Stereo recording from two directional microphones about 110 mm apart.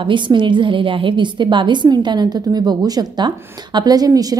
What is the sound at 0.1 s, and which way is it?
A woman's voice, 45° right (ahead or behind).